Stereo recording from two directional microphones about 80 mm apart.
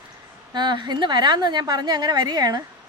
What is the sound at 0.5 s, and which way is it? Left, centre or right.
A woman's voice, right.